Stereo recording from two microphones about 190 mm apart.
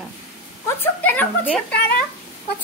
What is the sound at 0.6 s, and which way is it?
Speech, 10° left (ahead or behind).